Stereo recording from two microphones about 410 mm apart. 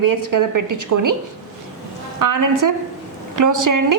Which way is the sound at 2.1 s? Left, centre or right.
Right.